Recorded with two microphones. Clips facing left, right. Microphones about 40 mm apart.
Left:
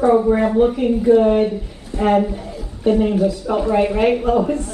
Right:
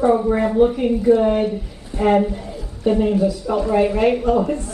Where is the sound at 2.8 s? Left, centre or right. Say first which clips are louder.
Left 1 dB; centre.